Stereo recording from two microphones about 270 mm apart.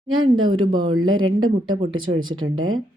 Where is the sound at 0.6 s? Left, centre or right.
Centre.